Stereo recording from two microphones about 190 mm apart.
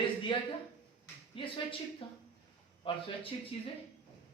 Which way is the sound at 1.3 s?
25° left (ahead or behind).